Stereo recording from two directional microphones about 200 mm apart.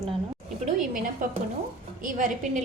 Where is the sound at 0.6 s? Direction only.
40° right (ahead or behind).